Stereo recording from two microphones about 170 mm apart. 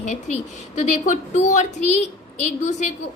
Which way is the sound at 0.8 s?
45° left (ahead or behind).